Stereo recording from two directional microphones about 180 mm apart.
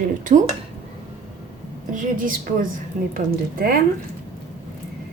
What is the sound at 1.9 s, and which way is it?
A woman's voice, 45° right (ahead or behind).